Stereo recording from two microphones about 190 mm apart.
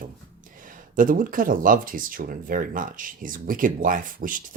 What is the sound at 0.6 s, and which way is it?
Speech, 45° right (ahead or behind).